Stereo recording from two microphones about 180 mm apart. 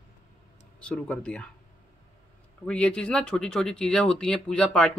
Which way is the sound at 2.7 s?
5° left (ahead or behind).